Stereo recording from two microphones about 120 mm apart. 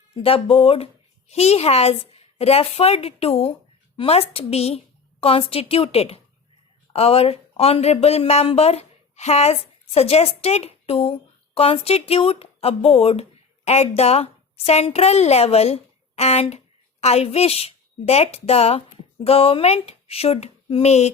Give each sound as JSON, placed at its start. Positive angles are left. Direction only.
{"t": 0.2, "sound": "a woman's voice", "side_deg": 50}